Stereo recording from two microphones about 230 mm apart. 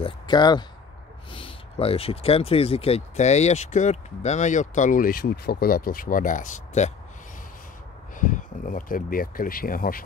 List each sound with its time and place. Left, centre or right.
0.0 s speech: centre
8.2 s speech: left